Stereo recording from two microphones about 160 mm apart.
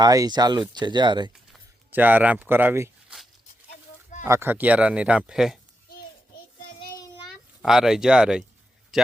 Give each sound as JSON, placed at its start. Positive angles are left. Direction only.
{"t": 0.0, "sound": "speech", "side_deg": -25}
{"t": 1.9, "sound": "speech", "side_deg": -10}
{"t": 4.2, "sound": "speech", "side_deg": -15}
{"t": 7.6, "sound": "speech", "side_deg": -5}